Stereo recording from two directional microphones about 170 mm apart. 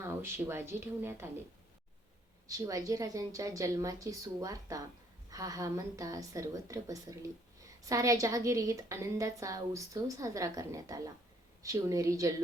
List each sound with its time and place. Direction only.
0.0 s speech: 15° right (ahead or behind)
2.5 s a woman's voice: 20° right (ahead or behind)